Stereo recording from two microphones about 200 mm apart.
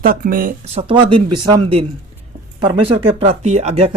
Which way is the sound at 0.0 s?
45° right (ahead or behind).